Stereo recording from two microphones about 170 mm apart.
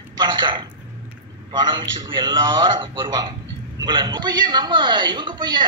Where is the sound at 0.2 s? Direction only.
25° right (ahead or behind).